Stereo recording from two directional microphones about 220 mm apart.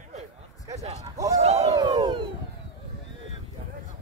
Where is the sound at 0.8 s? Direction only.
15° right (ahead or behind).